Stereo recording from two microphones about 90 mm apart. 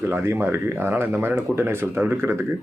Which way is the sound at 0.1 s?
25° right (ahead or behind).